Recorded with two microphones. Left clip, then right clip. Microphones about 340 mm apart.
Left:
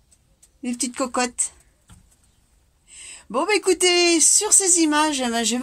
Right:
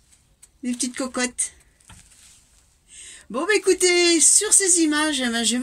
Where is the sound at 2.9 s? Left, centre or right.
Centre.